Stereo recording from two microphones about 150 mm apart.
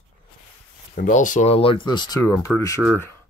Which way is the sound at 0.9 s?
65° left (ahead or behind).